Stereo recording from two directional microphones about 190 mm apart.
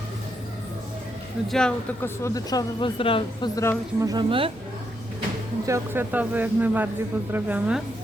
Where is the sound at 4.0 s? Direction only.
20° right (ahead or behind).